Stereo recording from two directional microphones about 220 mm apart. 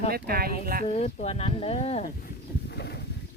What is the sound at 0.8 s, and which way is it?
Speech, 30° left (ahead or behind).